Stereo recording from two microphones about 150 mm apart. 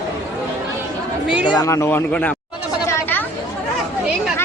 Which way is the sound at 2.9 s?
15° left (ahead or behind).